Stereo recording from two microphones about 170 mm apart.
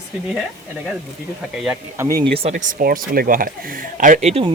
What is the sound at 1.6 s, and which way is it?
Speech, 10° right (ahead or behind).